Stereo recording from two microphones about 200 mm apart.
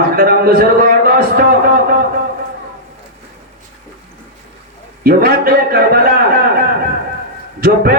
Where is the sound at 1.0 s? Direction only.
50° right (ahead or behind).